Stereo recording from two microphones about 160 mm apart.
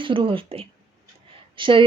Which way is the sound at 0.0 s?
30° right (ahead or behind).